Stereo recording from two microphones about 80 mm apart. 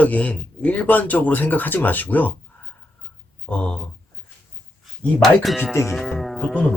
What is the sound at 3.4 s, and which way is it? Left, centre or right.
Speech, centre.